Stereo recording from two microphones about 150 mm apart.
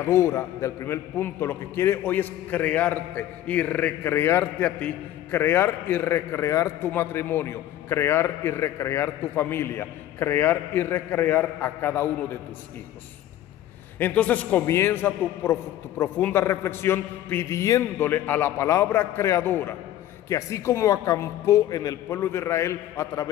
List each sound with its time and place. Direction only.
0.0 s a man's voice: 20° left (ahead or behind)
13.9 s a man's voice: 10° left (ahead or behind)